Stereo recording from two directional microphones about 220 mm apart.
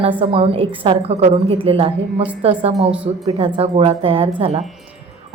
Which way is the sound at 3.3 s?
25° right (ahead or behind).